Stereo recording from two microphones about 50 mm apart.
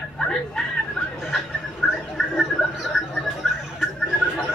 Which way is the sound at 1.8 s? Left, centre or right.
Centre.